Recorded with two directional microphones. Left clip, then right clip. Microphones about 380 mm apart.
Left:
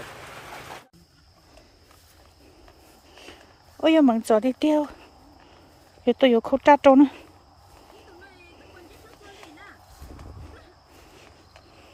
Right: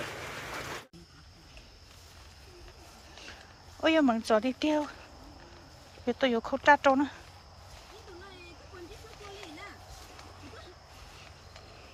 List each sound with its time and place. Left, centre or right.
3.8 s speech: centre
6.1 s speech: left